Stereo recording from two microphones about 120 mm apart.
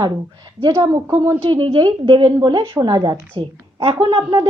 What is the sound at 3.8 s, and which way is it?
Speech, 50° right (ahead or behind).